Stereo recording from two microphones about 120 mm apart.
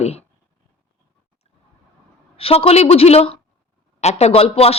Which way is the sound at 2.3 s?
55° left (ahead or behind).